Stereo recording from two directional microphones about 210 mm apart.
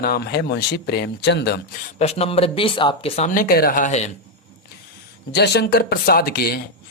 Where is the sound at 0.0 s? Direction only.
50° left (ahead or behind).